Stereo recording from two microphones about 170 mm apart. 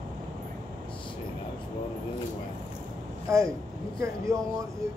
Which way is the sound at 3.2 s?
15° right (ahead or behind).